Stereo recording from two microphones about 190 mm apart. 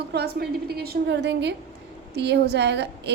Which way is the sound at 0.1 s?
60° right (ahead or behind).